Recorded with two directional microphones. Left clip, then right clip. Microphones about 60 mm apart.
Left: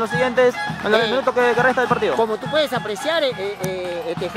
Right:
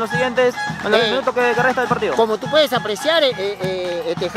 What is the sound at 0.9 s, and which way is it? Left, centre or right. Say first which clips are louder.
Speech: right 2 dB; right.